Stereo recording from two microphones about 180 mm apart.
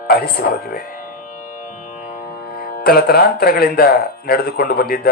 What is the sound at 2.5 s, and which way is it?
Speech, 55° left (ahead or behind).